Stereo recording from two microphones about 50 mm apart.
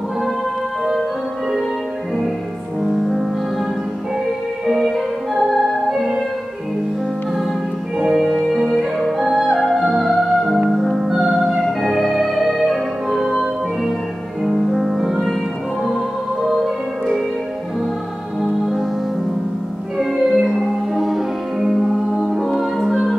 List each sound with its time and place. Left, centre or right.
2.8 s music: centre
4.6 s music: centre
8.0 s music: centre
16.4 s music: centre
18.4 s music: centre
20.0 s music: centre